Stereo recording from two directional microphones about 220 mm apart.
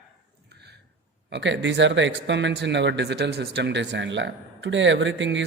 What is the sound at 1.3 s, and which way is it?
Speech, 55° right (ahead or behind).